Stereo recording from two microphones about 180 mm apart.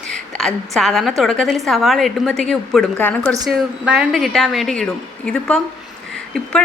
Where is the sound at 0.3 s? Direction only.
Centre (ahead or behind).